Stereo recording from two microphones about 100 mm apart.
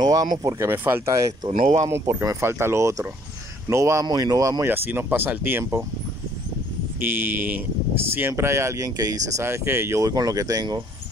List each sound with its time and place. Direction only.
0.0 s speech: 40° right (ahead or behind)
0.7 s speech: 25° right (ahead or behind)
1.9 s speech: 25° right (ahead or behind)
4.6 s speech: 20° right (ahead or behind)
7.1 s speech: 20° right (ahead or behind); by 9.2 s 40° right (ahead or behind)
9.4 s speech: 25° right (ahead or behind); by 10.8 s 40° right (ahead or behind)